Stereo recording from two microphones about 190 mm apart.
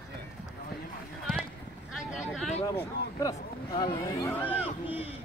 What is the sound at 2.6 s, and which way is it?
Speech, 20° left (ahead or behind).